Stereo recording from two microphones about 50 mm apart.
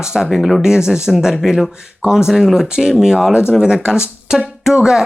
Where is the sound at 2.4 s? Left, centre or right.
Centre.